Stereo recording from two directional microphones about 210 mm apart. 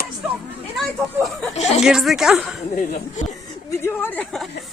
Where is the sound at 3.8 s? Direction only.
10° left (ahead or behind).